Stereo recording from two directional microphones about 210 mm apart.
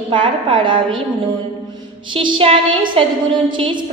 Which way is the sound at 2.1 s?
25° right (ahead or behind).